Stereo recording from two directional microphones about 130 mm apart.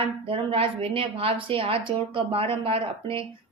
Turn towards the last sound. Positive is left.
turn(degrees=-45)  # may be behind; listen again after turning